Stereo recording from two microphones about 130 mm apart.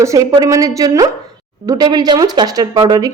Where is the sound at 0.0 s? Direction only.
25° right (ahead or behind).